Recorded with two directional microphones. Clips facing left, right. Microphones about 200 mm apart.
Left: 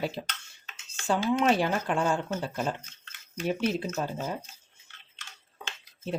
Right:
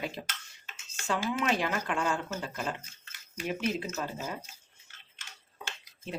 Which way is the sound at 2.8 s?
10° right (ahead or behind).